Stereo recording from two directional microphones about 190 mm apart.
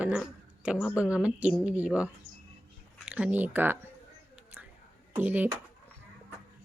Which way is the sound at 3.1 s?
5° right (ahead or behind).